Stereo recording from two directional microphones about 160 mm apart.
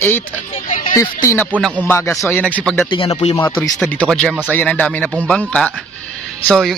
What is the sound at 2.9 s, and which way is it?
Speech, 30° left (ahead or behind).